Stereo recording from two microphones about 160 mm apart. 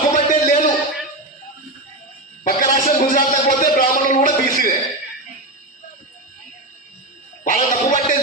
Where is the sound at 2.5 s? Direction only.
60° left (ahead or behind).